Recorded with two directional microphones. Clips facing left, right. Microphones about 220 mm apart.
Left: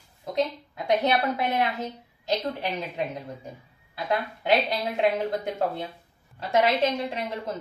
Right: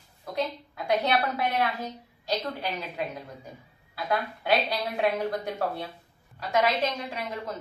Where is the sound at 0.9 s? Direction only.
20° left (ahead or behind).